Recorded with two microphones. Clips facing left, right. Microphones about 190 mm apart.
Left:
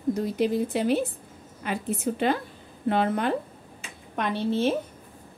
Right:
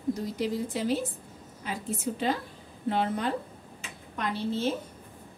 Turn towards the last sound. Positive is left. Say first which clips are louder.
# left 4 dB
turn(degrees=65)  # may be behind; listen again after turning